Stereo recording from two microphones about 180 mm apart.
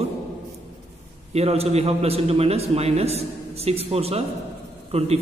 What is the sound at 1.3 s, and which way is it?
A man's voice, 35° right (ahead or behind).